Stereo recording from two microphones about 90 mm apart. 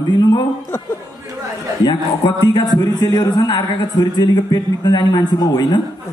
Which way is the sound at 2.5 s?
45° left (ahead or behind).